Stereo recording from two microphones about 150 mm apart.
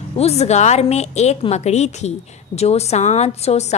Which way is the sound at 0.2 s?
45° left (ahead or behind).